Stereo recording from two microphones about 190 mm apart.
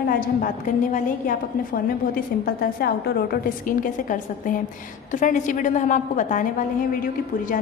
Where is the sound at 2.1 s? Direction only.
50° left (ahead or behind).